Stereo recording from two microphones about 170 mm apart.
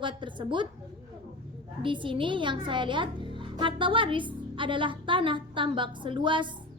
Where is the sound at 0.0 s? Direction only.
30° right (ahead or behind).